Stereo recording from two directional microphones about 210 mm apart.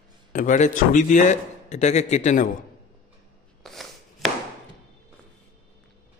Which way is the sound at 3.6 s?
Centre (ahead or behind).